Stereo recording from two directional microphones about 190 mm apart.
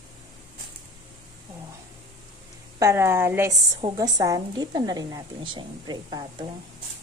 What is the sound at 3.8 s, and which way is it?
A woman's voice, 25° right (ahead or behind).